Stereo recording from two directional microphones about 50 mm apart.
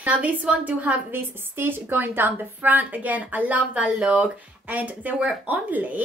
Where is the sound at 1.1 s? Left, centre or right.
Right.